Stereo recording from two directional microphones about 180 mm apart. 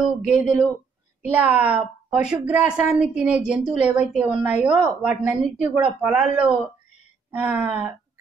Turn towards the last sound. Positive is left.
turn(degrees=-5)  # may be behind; listen again after turning